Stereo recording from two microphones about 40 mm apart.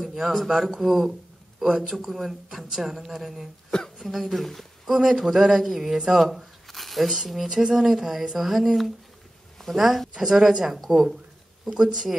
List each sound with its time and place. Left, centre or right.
0.0 s speech: centre
4.9 s speech: centre